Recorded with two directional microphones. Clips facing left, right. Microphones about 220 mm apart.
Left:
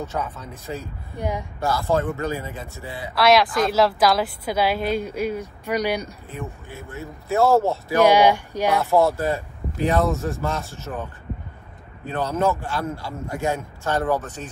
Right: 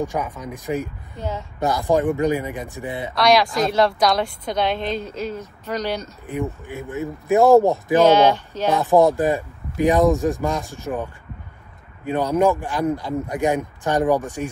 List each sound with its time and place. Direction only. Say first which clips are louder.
0.0 s speech: right 4 dB; 15° right (ahead or behind)
3.2 s a woman's voice: even; centre (ahead or behind)
6.2 s speech: right 7 dB; 15° right (ahead or behind)
8.0 s a woman's voice: even; 15° left (ahead or behind)
8.7 s speech: right 4 dB; 15° right (ahead or behind)
12.1 s speech: right 4 dB; 15° right (ahead or behind)